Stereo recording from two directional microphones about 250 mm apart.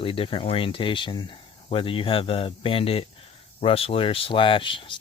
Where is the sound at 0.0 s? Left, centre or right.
Left.